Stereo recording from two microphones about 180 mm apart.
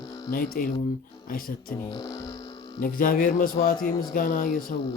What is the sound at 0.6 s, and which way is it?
Mantra, 50° left (ahead or behind).